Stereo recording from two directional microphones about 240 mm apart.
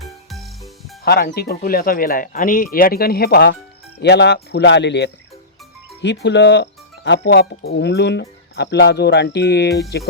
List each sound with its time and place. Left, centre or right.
0.0 s music: centre
1.0 s speech: left